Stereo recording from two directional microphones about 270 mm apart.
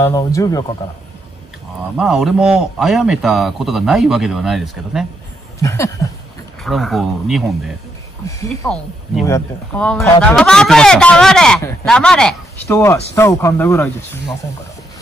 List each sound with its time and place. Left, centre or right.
0.0 s speech: centre
2.0 s speech: centre
5.6 s speech: centre
8.3 s speech: centre